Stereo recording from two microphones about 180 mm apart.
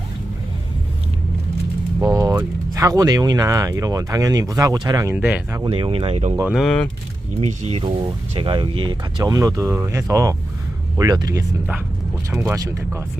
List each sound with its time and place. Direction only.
2.1 s speech: 15° right (ahead or behind)
5.1 s speech: 10° right (ahead or behind)
5.6 s speech: 30° right (ahead or behind)
6.5 s speech: centre (ahead or behind)
7.4 s speech: 35° right (ahead or behind)
8.4 s speech: 25° right (ahead or behind)